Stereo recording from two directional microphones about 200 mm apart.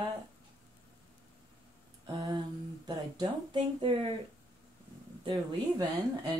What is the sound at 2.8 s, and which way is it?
Speech, 20° right (ahead or behind).